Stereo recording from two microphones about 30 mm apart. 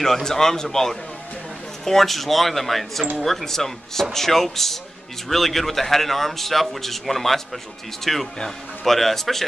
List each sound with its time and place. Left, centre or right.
0.2 s a man's voice: centre